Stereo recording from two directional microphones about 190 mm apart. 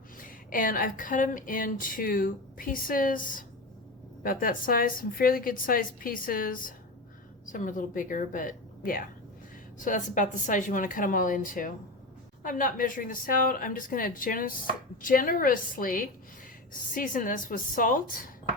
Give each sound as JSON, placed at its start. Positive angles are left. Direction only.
{"t": 0.2, "sound": "speech", "side_deg": 45}